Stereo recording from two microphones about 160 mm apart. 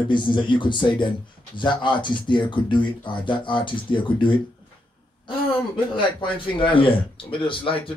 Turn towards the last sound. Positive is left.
turn(degrees=35)  # may be behind; listen again after turning